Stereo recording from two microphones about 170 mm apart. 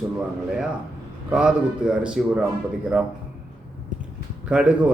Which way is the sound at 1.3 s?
5° right (ahead or behind).